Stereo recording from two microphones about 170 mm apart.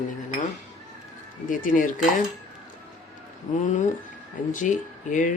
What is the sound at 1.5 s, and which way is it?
Speech, 55° left (ahead or behind).